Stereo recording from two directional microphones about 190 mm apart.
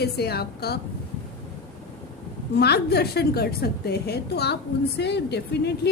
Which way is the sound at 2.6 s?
60° left (ahead or behind).